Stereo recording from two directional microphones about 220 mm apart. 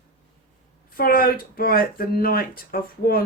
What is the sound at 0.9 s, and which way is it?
Speech, 40° left (ahead or behind).